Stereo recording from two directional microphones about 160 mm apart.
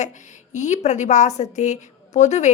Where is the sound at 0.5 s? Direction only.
45° left (ahead or behind).